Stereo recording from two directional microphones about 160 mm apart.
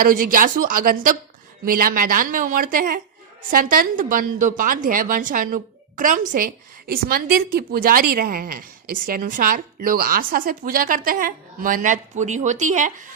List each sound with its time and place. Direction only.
0.0 s a woman's voice: 60° right (ahead or behind)